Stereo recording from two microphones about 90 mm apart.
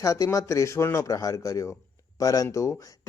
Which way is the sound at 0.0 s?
35° left (ahead or behind).